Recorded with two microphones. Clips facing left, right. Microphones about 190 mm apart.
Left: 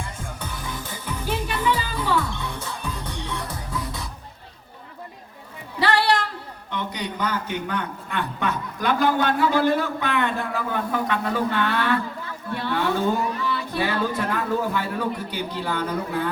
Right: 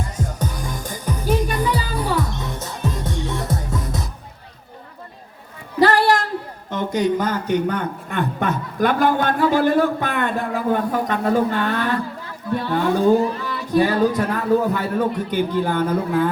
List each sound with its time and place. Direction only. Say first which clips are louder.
0.0 s music: right 8 dB; 40° right (ahead or behind)
5.8 s a sound: right 5 dB; 45° right (ahead or behind)
6.7 s a man's voice: right 10 dB; 45° right (ahead or behind)